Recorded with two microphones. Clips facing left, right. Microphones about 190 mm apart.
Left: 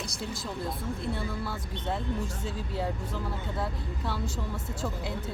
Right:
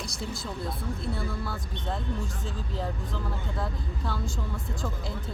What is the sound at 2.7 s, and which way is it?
Speech, 10° left (ahead or behind).